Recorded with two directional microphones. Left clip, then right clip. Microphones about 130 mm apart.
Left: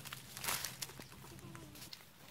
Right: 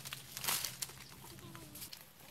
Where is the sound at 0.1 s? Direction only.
Centre (ahead or behind).